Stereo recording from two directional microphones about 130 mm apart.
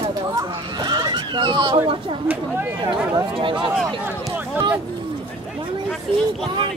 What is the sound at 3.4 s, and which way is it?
Speech, 40° right (ahead or behind).